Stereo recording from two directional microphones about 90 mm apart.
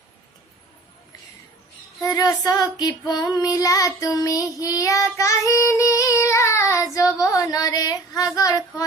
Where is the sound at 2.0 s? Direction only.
45° left (ahead or behind).